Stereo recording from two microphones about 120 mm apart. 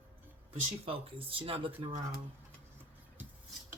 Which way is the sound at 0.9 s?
50° right (ahead or behind).